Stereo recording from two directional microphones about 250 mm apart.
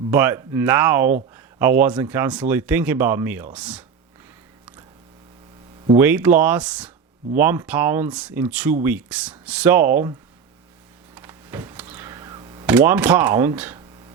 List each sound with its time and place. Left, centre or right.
0.1 s speech: centre
6.0 s speech: centre
11.1 s a sound: centre
12.6 s speech: centre